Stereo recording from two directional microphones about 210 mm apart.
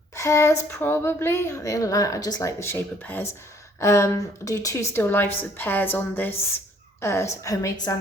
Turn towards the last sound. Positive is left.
turn(degrees=15)  # may be behind; listen again after turning